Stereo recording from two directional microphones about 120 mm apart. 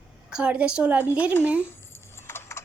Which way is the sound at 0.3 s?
10° right (ahead or behind).